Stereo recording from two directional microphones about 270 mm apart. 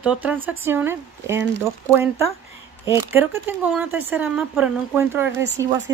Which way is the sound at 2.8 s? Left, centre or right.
Centre.